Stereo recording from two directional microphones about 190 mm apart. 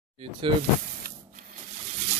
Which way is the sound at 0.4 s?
25° right (ahead or behind).